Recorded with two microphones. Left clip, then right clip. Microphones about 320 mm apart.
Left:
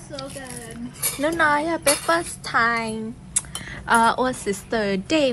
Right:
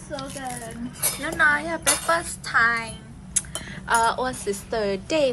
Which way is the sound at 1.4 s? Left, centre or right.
Centre.